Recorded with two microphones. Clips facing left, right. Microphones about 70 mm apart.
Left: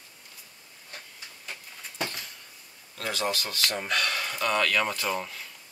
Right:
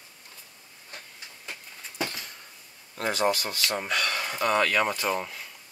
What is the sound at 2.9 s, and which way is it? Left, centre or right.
Speech, right.